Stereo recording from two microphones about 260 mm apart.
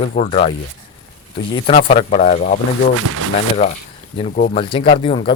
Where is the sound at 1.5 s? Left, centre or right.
Left.